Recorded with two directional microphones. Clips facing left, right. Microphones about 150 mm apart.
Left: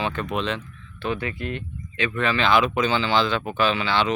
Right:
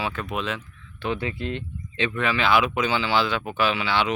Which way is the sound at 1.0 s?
20° right (ahead or behind).